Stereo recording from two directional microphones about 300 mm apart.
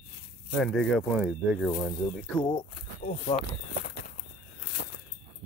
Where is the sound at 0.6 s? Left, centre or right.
Centre.